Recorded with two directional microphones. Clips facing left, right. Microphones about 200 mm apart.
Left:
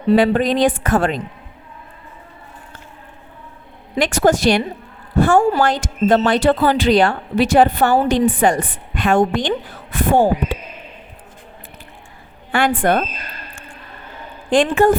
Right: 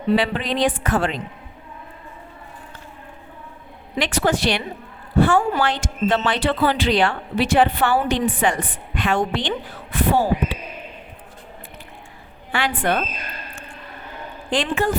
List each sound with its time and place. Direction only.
0.1 s a woman's voice: 45° left (ahead or behind)
3.9 s a woman's voice: 45° left (ahead or behind)
12.5 s a woman's voice: 50° left (ahead or behind)
14.5 s a woman's voice: 50° left (ahead or behind)